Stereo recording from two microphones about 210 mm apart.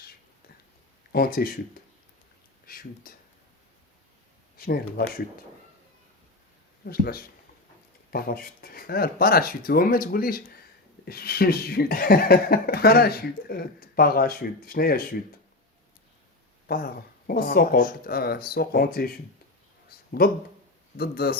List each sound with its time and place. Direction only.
1.1 s speech: 45° left (ahead or behind)
2.6 s speech: 45° left (ahead or behind)
4.5 s speech: 45° left (ahead or behind)
6.8 s speech: 45° left (ahead or behind)
16.6 s speech: 45° left (ahead or behind)
20.2 s speech: 45° left (ahead or behind)